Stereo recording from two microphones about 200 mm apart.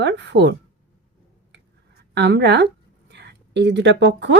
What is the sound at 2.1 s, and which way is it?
Speech, 60° right (ahead or behind).